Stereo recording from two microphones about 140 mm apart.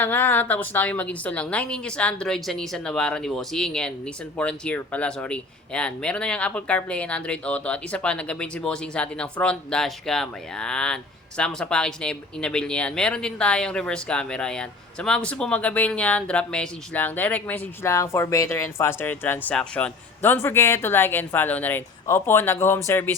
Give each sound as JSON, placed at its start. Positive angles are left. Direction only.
{"t": 0.0, "sound": "a woman's voice", "side_deg": 15}